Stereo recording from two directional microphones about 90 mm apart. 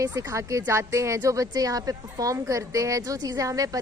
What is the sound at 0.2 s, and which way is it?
A woman's voice, 35° right (ahead or behind).